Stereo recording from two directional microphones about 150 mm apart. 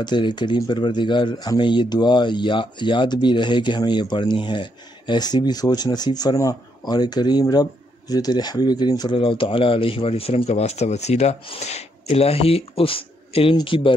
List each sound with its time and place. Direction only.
0.0 s speech: 30° left (ahead or behind)